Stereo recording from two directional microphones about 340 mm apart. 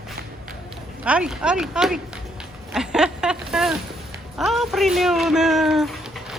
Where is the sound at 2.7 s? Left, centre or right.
Centre.